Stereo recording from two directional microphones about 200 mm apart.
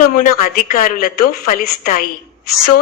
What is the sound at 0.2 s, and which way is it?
A woman's voice, 45° left (ahead or behind).